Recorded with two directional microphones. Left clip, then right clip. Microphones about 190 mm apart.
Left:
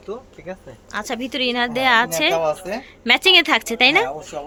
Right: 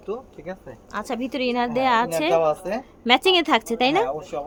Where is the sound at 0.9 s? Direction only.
Centre (ahead or behind).